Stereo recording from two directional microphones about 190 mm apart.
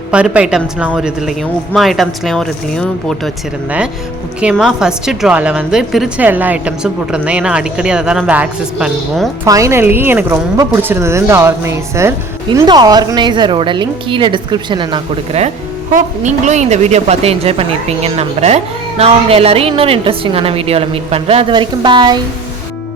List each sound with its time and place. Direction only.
0.1 s a woman's voice: 5° right (ahead or behind)
9.4 s a woman's voice: 15° right (ahead or behind)